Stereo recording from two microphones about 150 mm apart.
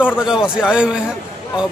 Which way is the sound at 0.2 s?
5° right (ahead or behind).